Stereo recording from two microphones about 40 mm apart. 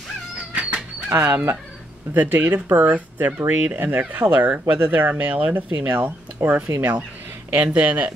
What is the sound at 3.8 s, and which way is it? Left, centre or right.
Speech, right.